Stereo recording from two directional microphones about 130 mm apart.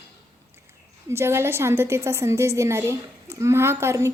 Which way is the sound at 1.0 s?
20° right (ahead or behind).